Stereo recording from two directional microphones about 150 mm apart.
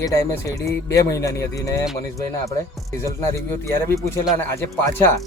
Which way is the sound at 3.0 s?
20° left (ahead or behind).